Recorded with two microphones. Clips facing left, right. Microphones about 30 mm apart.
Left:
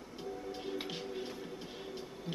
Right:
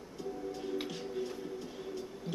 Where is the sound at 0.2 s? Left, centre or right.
Left.